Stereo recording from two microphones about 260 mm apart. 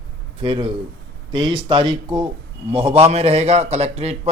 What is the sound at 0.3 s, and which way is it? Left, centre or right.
Speech, right.